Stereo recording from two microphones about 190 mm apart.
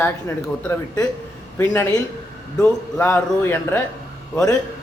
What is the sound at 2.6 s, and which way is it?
A man's voice, 10° left (ahead or behind).